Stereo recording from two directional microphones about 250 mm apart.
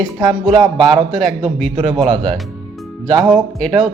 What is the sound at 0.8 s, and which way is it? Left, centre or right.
Speech, centre.